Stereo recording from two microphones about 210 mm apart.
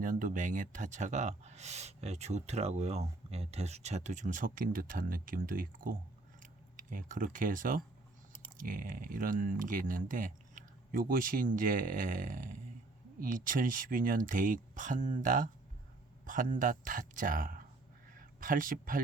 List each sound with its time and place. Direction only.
0.0 s speech: 40° right (ahead or behind)